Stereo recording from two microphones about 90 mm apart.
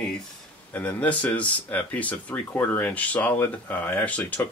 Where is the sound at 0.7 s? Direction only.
15° left (ahead or behind).